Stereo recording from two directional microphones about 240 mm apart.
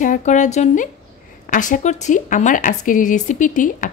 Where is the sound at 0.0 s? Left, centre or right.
Left.